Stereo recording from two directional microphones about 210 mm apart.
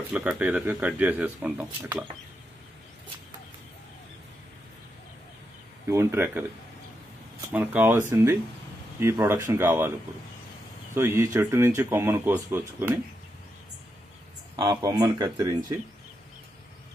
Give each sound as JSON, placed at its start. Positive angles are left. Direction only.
{"t": 0.1, "sound": "speech", "side_deg": -5}
{"t": 5.9, "sound": "speech", "side_deg": -10}
{"t": 7.5, "sound": "speech", "side_deg": -10}
{"t": 11.0, "sound": "speech", "side_deg": -10}
{"t": 14.6, "sound": "speech", "side_deg": -15}